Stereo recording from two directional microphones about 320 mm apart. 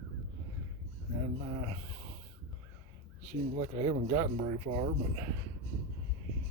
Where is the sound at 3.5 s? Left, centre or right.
Centre.